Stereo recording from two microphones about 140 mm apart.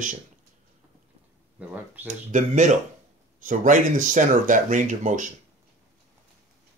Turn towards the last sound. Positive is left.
turn(degrees=-65)  # may be behind; listen again after turning